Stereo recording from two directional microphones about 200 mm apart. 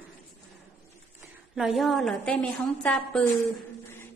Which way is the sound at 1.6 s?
Centre (ahead or behind).